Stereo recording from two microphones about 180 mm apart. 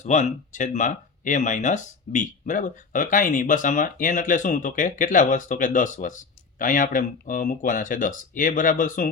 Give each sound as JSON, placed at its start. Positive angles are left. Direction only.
{"t": 0.0, "sound": "speech", "side_deg": 40}